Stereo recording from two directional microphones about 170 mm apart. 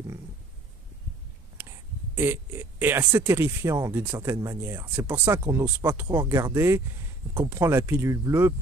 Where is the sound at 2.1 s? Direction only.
15° right (ahead or behind).